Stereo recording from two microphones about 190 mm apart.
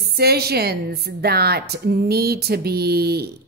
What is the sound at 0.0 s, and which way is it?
A woman's voice, 55° right (ahead or behind).